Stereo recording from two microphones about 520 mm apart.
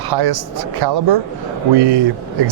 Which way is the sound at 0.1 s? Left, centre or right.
Right.